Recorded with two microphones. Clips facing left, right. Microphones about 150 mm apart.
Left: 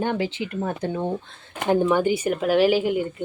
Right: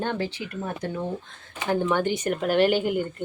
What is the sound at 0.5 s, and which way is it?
Speech, 30° left (ahead or behind).